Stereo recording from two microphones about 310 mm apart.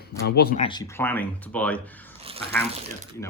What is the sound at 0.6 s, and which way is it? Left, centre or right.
Speech, centre.